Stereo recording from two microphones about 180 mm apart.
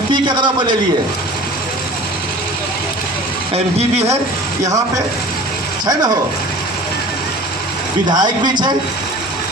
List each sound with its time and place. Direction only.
0.1 s a sound: 25° right (ahead or behind)
3.5 s speech: 35° right (ahead or behind)
8.1 s a man's voice: 25° right (ahead or behind)